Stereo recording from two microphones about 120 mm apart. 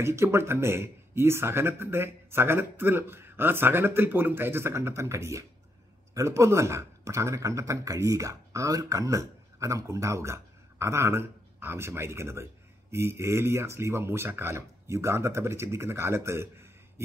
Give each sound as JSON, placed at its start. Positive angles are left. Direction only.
{"t": 0.0, "sound": "a man's voice", "side_deg": -20}